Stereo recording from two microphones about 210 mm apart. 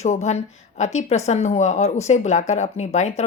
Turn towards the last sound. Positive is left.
turn(degrees=35)  # may be behind; listen again after turning